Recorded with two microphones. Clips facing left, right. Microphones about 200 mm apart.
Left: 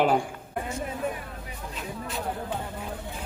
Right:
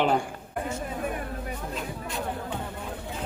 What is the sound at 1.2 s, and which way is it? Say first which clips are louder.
Vehicle: right 6 dB; 50° right (ahead or behind).